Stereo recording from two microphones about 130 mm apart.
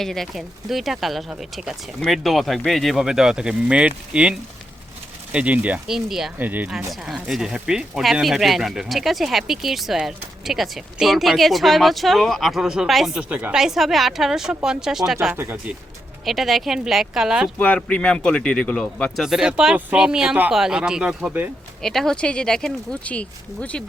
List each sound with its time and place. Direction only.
0.0 s speech: 5° left (ahead or behind)
6.4 s speech: 15° right (ahead or behind)
15.4 s speech: 15° right (ahead or behind)
16.2 s speech: centre (ahead or behind)
17.6 s speech: 10° left (ahead or behind)
19.2 s speech: 5° right (ahead or behind)
21.8 s speech: 5° left (ahead or behind)